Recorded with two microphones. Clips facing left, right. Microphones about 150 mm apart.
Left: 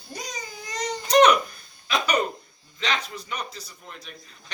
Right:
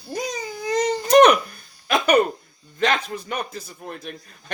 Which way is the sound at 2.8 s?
50° right (ahead or behind).